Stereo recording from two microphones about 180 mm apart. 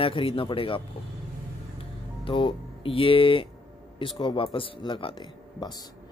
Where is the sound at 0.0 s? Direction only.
30° left (ahead or behind).